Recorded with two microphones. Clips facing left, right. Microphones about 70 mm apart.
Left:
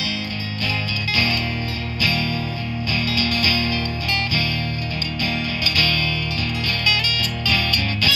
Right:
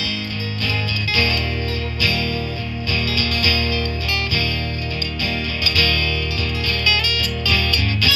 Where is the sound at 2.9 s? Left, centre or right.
Left.